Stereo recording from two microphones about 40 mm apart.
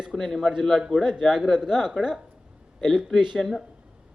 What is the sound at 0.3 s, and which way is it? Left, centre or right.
Speech, centre.